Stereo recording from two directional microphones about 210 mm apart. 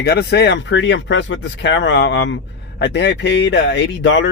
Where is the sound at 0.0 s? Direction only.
50° left (ahead or behind).